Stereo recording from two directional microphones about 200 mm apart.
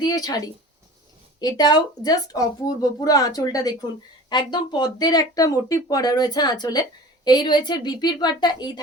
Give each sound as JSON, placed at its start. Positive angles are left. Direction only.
{"t": 0.0, "sound": "speech", "side_deg": 20}